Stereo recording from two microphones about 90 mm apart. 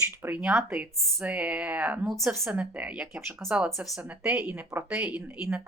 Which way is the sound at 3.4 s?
5° left (ahead or behind).